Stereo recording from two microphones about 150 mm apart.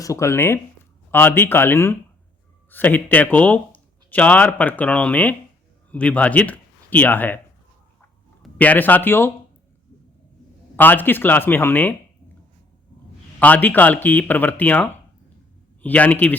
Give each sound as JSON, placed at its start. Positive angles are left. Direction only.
{"t": 0.0, "sound": "speech", "side_deg": 20}
{"t": 8.4, "sound": "speech", "side_deg": 10}
{"t": 10.8, "sound": "speech", "side_deg": 15}
{"t": 13.4, "sound": "speech", "side_deg": 10}